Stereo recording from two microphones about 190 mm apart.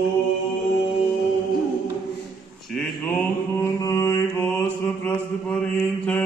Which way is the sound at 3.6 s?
15° left (ahead or behind).